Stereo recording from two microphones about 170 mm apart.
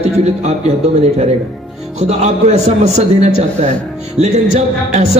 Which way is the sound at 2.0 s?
40° right (ahead or behind).